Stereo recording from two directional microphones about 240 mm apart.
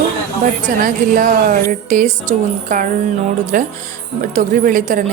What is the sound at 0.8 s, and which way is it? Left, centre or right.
A woman's voice, right.